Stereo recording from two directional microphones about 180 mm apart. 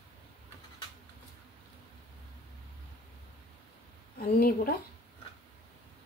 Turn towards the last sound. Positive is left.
turn(degrees=55)  # may be behind; listen again after turning